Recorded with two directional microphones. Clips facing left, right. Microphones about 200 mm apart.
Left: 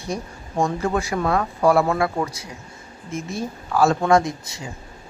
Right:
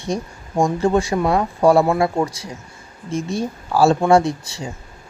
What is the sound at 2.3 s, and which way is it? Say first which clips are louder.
Speech: right 3 dB; 30° right (ahead or behind).